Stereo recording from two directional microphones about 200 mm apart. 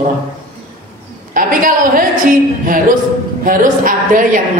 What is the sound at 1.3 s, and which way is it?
Speech, 45° right (ahead or behind).